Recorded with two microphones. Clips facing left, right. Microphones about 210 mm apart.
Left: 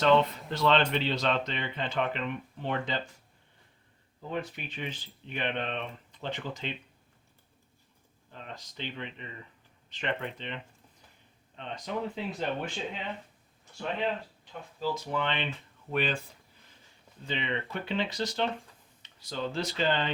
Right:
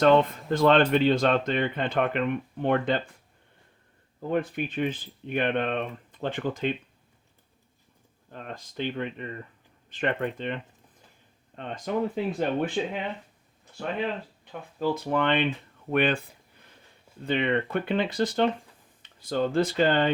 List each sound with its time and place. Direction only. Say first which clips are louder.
0.0 s speech: right 4 dB; 50° right (ahead or behind)
4.3 s speech: right 8 dB; 55° right (ahead or behind)
8.3 s speech: right 5 dB; 50° right (ahead or behind)
14.8 s speech: right 6 dB; 60° right (ahead or behind)